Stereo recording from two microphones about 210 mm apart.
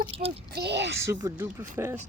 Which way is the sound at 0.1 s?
25° right (ahead or behind).